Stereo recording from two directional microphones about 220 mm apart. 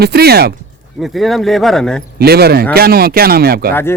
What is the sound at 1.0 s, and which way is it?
Speech, centre (ahead or behind).